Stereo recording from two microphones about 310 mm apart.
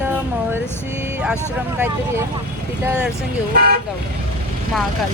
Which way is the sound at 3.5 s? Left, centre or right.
Right.